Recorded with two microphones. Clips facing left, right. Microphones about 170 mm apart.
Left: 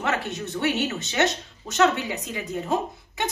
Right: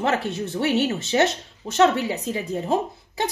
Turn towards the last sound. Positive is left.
turn(degrees=-30)  # may be behind; listen again after turning